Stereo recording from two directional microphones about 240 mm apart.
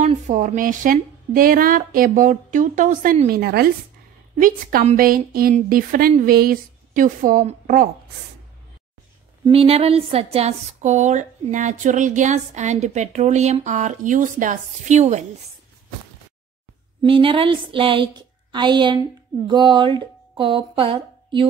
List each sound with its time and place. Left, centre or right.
0.0 s speech: right
9.4 s a woman's voice: right
17.0 s a woman's voice: right